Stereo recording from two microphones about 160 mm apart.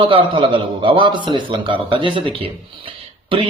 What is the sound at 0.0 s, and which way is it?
A man's voice, 30° right (ahead or behind).